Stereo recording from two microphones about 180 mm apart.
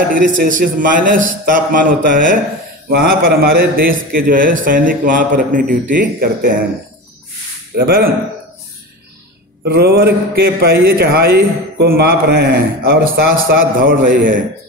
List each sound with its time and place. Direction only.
0.1 s a man's voice: 50° right (ahead or behind)
7.7 s a man's voice: 55° right (ahead or behind)
9.7 s a man's voice: 60° right (ahead or behind)